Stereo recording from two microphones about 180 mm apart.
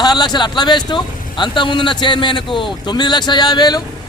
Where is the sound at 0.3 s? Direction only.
25° left (ahead or behind).